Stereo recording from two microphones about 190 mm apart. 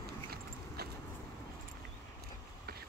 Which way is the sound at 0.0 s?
55° right (ahead or behind).